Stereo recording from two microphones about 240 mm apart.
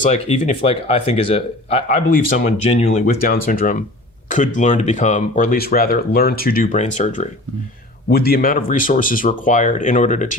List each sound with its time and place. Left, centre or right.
0.0 s speech: left
8.1 s speech: left